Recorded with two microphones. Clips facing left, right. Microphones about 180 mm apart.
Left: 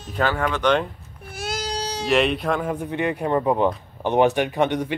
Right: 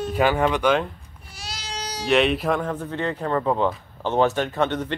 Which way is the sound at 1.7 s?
30° left (ahead or behind).